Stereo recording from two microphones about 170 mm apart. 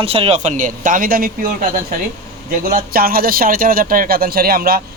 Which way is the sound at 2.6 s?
60° right (ahead or behind).